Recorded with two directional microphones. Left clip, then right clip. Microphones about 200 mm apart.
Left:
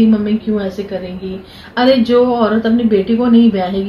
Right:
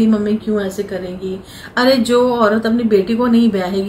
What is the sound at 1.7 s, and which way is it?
A woman's voice, 10° right (ahead or behind).